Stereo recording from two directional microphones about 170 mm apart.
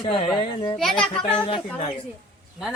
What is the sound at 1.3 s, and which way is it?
Speech, 35° left (ahead or behind).